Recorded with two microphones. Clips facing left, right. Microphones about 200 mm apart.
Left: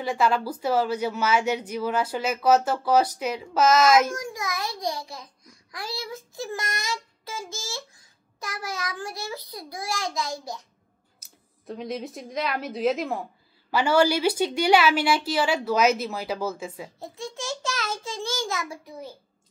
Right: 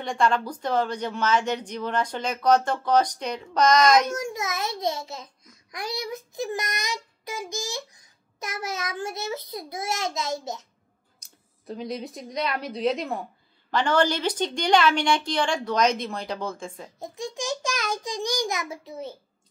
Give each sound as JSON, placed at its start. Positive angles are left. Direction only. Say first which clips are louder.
{"t": 0.0, "sound": "a woman's voice", "louder": "even", "side_deg": 5}
{"t": 4.1, "sound": "a child's voice", "louder": "right 2 dB", "side_deg": -25}
{"t": 11.1, "sound": "a woman's voice", "louder": "left 2 dB", "side_deg": 0}
{"t": 17.0, "sound": "a child's voice", "louder": "right 4 dB", "side_deg": -15}